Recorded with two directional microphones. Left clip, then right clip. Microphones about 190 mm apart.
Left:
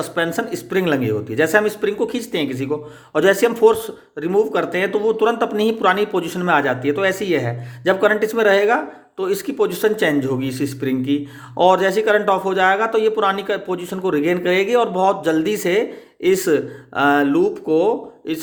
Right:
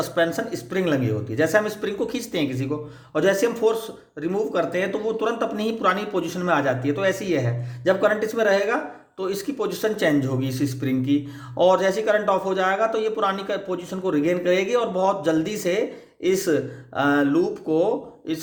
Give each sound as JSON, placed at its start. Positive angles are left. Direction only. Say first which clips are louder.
{"t": 0.3, "sound": "speech", "louder": "left 5 dB", "side_deg": 25}